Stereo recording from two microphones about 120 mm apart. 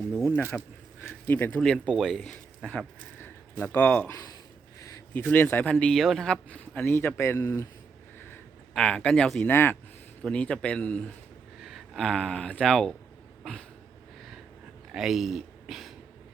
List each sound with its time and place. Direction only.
0.5 s speech: 10° left (ahead or behind)
5.1 s speech: 15° left (ahead or behind)
8.7 s speech: 10° left (ahead or behind)
13.4 s a sound: 5° left (ahead or behind)
14.9 s speech: centre (ahead or behind)